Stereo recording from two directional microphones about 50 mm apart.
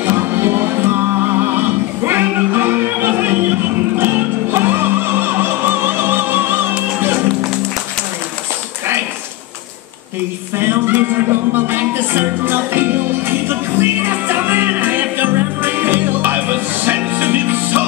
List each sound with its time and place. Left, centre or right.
0.3 s music: right
10.6 s music: right